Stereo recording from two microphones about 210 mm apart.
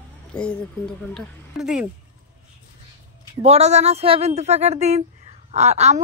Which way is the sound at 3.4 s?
30° right (ahead or behind).